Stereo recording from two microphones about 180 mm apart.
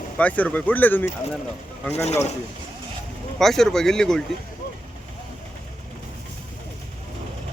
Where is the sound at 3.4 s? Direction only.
Centre (ahead or behind).